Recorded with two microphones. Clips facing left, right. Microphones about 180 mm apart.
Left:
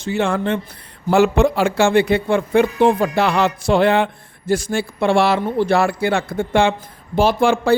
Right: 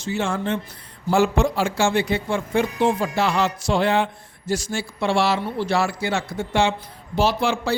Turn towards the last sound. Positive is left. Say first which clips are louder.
# left 6 dB
turn(degrees=50)  # may be behind; listen again after turning